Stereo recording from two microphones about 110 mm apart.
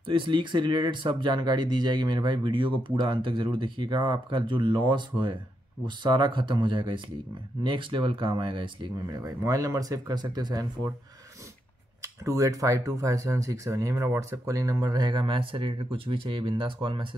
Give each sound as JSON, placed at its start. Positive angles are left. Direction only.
{"t": 0.0, "sound": "speech", "side_deg": -50}
{"t": 9.0, "sound": "speech", "side_deg": -35}
{"t": 12.0, "sound": "speech", "side_deg": -30}